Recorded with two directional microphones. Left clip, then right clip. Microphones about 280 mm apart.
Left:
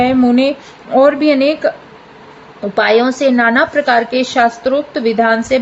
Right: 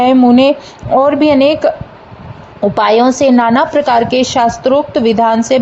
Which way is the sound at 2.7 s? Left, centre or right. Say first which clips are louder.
Right 2 dB; centre.